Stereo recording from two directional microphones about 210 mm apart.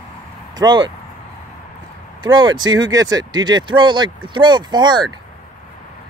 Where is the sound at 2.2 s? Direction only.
20° right (ahead or behind).